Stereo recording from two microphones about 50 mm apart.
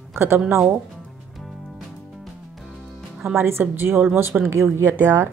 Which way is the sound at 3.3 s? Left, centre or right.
Right.